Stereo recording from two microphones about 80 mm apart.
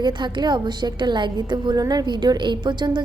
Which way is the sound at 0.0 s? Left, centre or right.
Right.